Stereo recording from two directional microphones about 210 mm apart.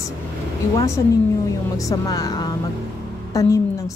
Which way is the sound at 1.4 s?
15° left (ahead or behind).